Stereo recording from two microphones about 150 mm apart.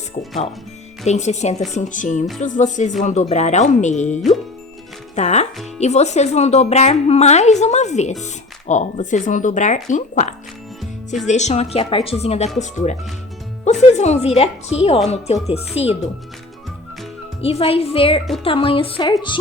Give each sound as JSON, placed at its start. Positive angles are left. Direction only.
{"t": 1.0, "sound": "a woman's voice", "side_deg": 50}
{"t": 17.4, "sound": "a woman's voice", "side_deg": 40}